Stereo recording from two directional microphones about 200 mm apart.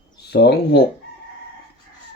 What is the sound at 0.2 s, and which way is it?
Speech, 55° left (ahead or behind).